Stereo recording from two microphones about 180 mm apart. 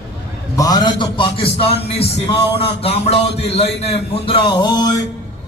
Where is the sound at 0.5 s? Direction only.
20° left (ahead or behind).